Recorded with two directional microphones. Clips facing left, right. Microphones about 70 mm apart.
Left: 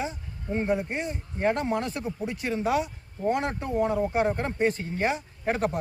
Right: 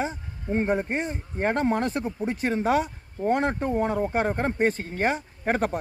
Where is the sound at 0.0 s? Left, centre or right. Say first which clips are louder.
Right 3 dB; right.